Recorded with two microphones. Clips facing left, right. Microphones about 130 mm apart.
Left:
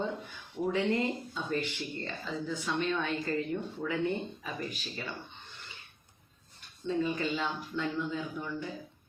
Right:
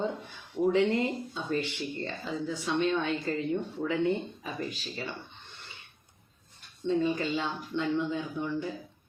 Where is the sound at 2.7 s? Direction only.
25° right (ahead or behind).